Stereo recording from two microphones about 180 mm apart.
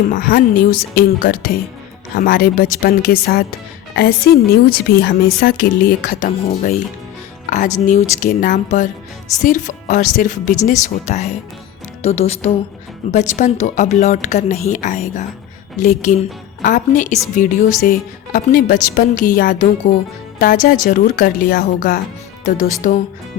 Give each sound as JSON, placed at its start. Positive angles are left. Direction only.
{"t": 0.1, "sound": "a woman's voice", "side_deg": 55}
{"t": 8.2, "sound": "a woman's voice", "side_deg": 50}
{"t": 22.4, "sound": "a woman's voice", "side_deg": 45}